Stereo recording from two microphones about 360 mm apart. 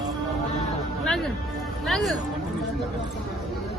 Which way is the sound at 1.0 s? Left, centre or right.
Centre.